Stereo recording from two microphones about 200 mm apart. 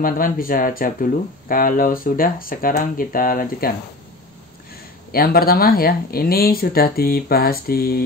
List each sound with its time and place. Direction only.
0.0 s speech: 45° left (ahead or behind)
5.1 s speech: 50° left (ahead or behind)